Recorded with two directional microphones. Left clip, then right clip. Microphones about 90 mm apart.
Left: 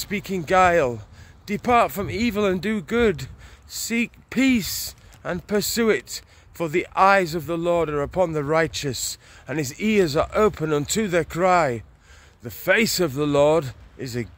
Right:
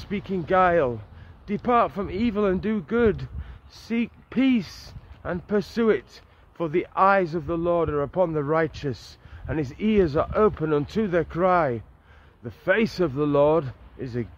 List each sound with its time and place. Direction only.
0.0 s speech: 25° left (ahead or behind)